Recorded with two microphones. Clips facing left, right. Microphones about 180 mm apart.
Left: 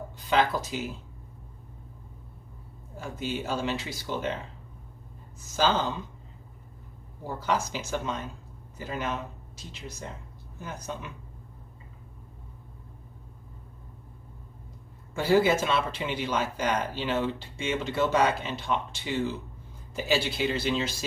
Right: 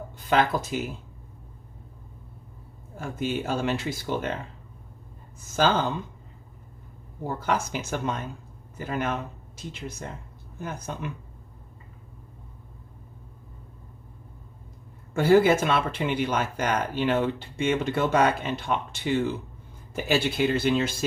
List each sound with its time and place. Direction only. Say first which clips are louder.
0.3 s speech: right 2 dB; 50° right (ahead or behind)
3.0 s speech: right 4 dB; 50° right (ahead or behind)
5.5 s speech: right 3 dB; 55° right (ahead or behind)
7.3 s speech: right 2 dB; 55° right (ahead or behind)
15.1 s speech: right 4 dB; 55° right (ahead or behind)